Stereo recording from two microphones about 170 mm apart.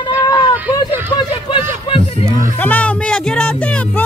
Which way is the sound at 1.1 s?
25° left (ahead or behind).